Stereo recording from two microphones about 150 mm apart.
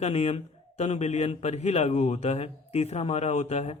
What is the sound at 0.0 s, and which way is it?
A man's voice, 45° left (ahead or behind).